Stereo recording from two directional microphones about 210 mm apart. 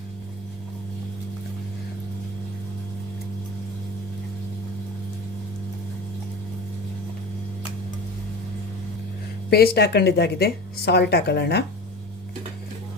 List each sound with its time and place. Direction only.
9.5 s speech: 50° left (ahead or behind)